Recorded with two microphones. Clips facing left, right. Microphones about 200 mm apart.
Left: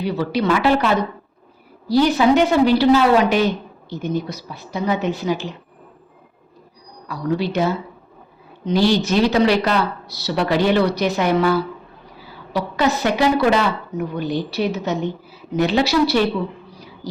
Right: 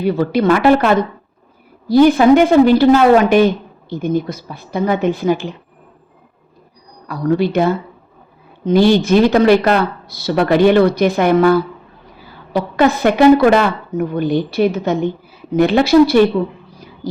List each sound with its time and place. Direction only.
0.0 s a woman's voice: 50° right (ahead or behind)
7.1 s a woman's voice: 55° right (ahead or behind)